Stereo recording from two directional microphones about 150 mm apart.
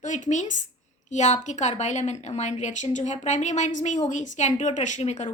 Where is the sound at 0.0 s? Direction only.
55° left (ahead or behind).